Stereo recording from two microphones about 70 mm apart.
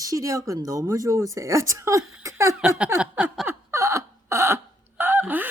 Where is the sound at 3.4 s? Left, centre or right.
Right.